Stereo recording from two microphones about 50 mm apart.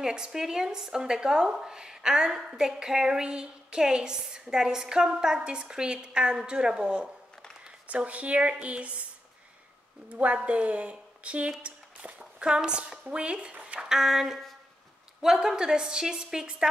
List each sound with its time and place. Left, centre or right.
0.0 s speech: centre
10.1 s a woman's voice: right
13.7 s speech: centre